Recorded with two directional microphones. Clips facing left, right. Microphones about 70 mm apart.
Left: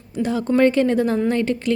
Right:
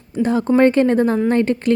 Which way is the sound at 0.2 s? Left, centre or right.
Right.